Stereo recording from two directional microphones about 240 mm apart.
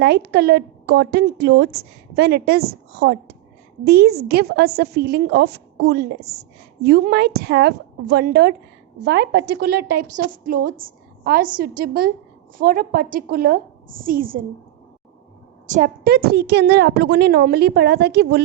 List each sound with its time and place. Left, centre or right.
0.0 s a woman's voice: right
15.6 s a woman's voice: right